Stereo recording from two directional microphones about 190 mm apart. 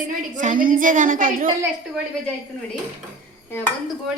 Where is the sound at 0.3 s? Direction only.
45° right (ahead or behind).